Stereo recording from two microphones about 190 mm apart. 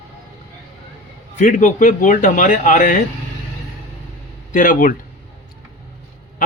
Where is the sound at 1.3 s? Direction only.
40° left (ahead or behind).